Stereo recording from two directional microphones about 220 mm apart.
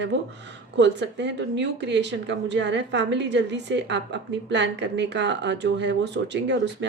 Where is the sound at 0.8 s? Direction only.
50° right (ahead or behind).